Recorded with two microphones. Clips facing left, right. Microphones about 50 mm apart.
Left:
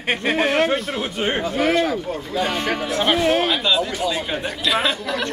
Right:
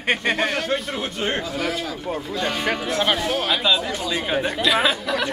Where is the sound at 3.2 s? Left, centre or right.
Left.